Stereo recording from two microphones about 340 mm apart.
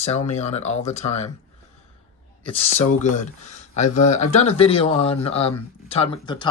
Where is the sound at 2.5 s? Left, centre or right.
Centre.